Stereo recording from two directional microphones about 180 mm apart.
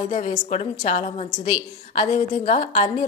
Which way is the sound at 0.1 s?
35° left (ahead or behind).